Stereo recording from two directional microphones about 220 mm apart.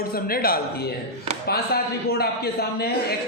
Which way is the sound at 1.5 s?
45° left (ahead or behind).